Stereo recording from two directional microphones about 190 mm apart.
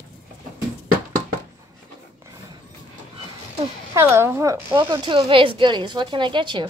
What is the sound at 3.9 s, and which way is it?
A woman's voice, 15° right (ahead or behind).